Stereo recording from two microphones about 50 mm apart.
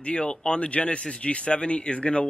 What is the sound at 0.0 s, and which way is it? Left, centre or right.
Speech, left.